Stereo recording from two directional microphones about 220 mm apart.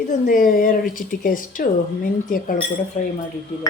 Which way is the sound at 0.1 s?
40° left (ahead or behind).